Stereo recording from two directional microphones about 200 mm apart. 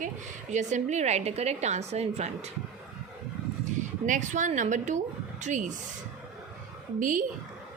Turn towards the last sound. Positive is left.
turn(degrees=-40)  # may be behind; listen again after turning